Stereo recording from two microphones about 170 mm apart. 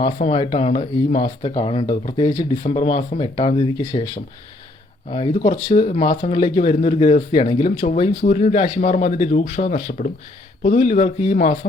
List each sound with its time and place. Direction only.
0.0 s speech: 35° left (ahead or behind)
5.4 s speech: 30° left (ahead or behind); by 10.1 s 50° left (ahead or behind)
10.8 s speech: 40° left (ahead or behind)